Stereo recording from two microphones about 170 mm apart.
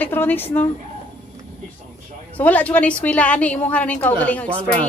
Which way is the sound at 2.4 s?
10° left (ahead or behind).